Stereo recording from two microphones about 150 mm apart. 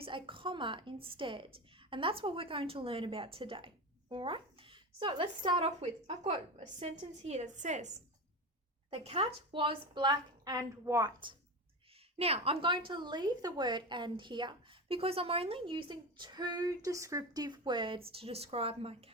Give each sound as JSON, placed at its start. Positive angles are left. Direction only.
{"t": 0.0, "sound": "a woman's voice", "side_deg": -35}
{"t": 5.8, "sound": "a woman's voice", "side_deg": -50}
{"t": 8.9, "sound": "a woman's voice", "side_deg": -40}
{"t": 12.1, "sound": "a woman's voice", "side_deg": -40}